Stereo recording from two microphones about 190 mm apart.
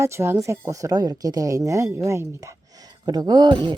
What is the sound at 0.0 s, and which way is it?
Speech, 15° right (ahead or behind).